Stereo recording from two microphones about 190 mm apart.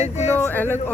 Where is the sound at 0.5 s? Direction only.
10° left (ahead or behind).